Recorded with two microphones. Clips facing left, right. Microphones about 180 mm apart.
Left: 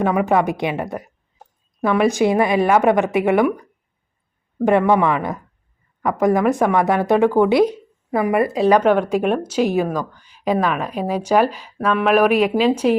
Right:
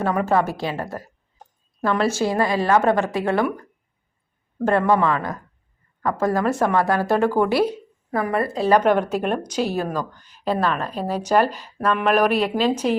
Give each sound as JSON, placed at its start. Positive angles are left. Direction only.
{"t": 0.0, "sound": "a woman's voice", "side_deg": 10}
{"t": 8.8, "sound": "speech", "side_deg": -10}
{"t": 9.0, "sound": "speech", "side_deg": 10}